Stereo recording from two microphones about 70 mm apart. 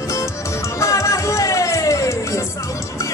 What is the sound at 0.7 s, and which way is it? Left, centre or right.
Music, left.